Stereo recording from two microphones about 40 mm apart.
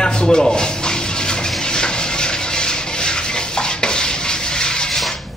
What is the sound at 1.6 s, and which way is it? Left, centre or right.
Rub, centre.